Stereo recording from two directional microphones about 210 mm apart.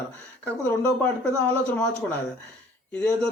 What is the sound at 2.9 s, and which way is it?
Speech, 5° left (ahead or behind).